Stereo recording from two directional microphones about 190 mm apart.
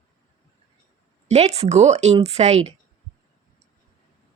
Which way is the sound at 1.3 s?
35° right (ahead or behind).